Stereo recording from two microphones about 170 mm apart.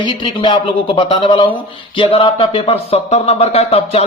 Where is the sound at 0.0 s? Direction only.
30° left (ahead or behind).